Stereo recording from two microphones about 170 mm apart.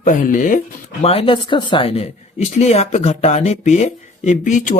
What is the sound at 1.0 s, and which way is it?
Speech, 35° left (ahead or behind).